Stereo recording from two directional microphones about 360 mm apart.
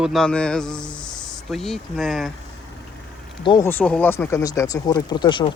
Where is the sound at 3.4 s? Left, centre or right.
Centre.